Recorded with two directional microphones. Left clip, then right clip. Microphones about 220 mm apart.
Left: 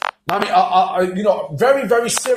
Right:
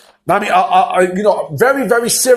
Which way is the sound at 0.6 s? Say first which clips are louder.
Right 1 dB; 25° right (ahead or behind).